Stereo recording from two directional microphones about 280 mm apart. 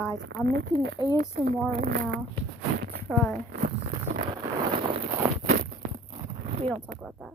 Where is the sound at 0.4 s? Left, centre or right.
Right.